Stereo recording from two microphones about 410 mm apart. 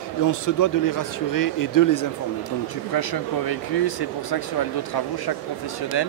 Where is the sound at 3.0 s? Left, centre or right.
Left.